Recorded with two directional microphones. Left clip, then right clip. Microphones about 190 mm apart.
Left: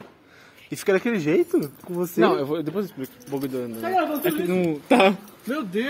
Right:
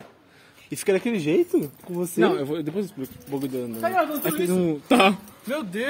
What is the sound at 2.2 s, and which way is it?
A man's voice, 15° right (ahead or behind).